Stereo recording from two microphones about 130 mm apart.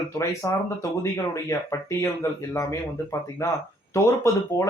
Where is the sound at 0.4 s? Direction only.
20° left (ahead or behind).